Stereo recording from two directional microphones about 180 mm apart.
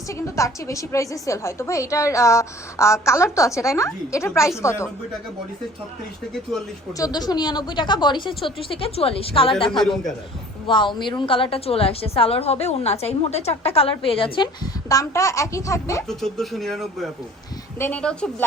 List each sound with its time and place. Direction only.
0.1 s a woman's voice: 15° left (ahead or behind)
7.0 s a woman's voice: 20° left (ahead or behind)
16.0 s a woman's voice: centre (ahead or behind)